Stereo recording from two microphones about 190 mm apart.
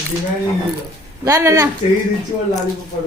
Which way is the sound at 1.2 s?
15° right (ahead or behind).